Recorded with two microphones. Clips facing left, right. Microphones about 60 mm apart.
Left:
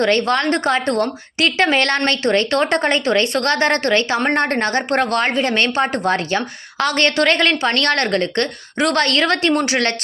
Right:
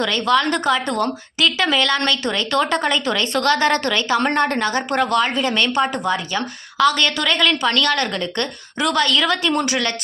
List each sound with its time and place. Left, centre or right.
0.0 s a woman's voice: left
1.4 s a woman's voice: left